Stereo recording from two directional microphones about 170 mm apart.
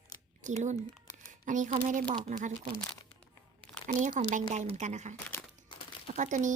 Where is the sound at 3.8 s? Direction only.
50° right (ahead or behind).